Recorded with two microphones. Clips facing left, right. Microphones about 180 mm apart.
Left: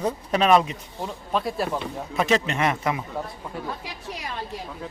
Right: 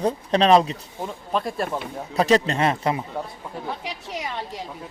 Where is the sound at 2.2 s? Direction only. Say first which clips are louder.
Right 3 dB; 35° right (ahead or behind).